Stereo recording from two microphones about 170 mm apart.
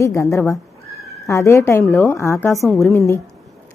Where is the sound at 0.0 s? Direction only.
15° left (ahead or behind).